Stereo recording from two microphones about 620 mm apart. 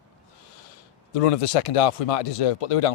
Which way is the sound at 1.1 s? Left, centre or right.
Left.